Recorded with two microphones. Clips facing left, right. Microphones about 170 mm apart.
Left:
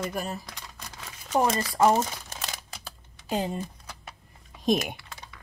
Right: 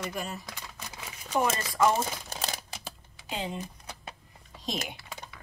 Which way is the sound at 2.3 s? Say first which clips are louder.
Right 3 dB; 35° right (ahead or behind).